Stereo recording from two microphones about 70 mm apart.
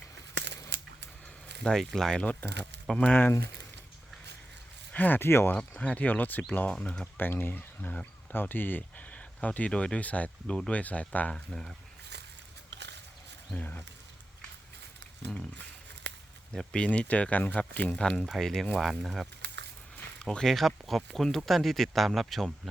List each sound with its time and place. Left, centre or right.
1.6 s speech: centre
3.0 s speech: left
4.9 s speech: left
5.5 s speech: centre
6.7 s speech: centre
7.2 s speech: left
13.6 s speech: left
16.7 s speech: centre